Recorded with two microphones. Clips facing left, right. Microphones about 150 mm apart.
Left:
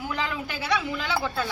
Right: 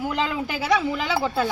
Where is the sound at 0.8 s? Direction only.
30° right (ahead or behind).